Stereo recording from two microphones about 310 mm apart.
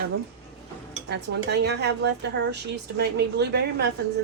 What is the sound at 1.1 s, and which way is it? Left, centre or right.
Speech, right.